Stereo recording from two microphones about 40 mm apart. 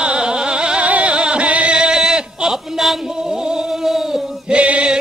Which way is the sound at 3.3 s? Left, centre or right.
Centre.